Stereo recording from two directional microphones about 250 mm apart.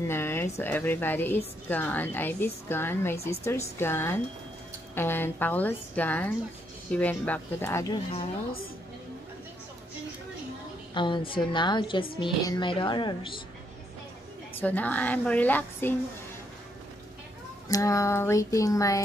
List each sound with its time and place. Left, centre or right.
0.1 s a woman's voice: centre
11.0 s a woman's voice: centre
14.6 s a woman's voice: centre
17.6 s a woman's voice: centre